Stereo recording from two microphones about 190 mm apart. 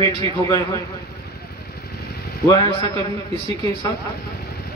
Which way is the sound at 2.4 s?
20° left (ahead or behind).